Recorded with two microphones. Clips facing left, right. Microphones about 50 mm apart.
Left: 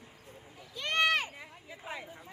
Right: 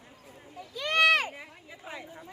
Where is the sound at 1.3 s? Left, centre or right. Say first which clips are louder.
Right 2 dB; centre.